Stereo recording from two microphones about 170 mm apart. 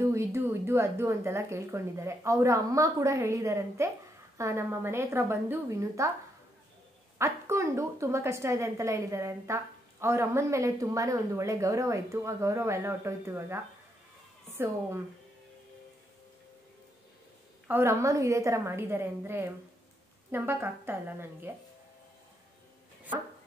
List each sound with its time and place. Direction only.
0.0 s a woman's voice: 15° right (ahead or behind)
7.2 s a woman's voice: 15° right (ahead or behind)
17.6 s a woman's voice: 15° right (ahead or behind)